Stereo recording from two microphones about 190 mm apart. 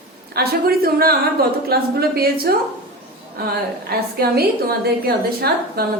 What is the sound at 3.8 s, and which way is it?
A woman's voice, 55° right (ahead or behind).